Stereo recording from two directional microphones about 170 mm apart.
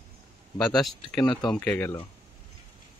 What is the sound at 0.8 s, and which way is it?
Speech, centre (ahead or behind).